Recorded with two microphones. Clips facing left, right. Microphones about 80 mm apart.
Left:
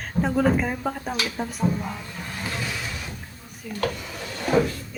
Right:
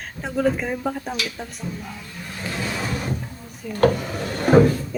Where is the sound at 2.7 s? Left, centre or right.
Right.